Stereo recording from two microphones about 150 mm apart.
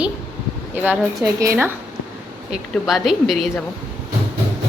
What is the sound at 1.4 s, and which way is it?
Speech, 15° right (ahead or behind).